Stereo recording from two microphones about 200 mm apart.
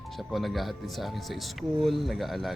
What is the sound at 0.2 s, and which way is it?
Speech, centre (ahead or behind).